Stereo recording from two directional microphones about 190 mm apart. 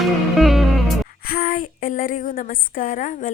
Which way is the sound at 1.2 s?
50° left (ahead or behind).